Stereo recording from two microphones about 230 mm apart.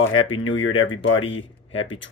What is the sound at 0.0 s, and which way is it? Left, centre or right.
Speech, left.